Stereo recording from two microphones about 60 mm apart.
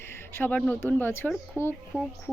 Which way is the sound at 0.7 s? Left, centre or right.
Left.